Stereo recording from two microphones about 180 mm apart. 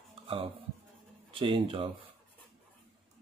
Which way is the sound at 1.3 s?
30° right (ahead or behind).